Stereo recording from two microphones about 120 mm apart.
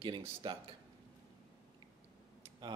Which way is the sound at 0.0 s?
45° right (ahead or behind).